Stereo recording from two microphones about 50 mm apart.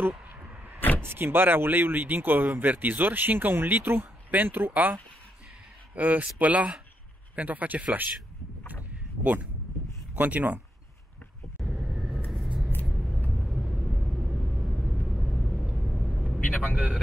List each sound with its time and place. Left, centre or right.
1.0 s speech: right
5.9 s speech: right
8.9 s a sound: right
10.1 s speech: right
11.6 s vehicle: centre
16.3 s vehicle: left
16.7 s speech: centre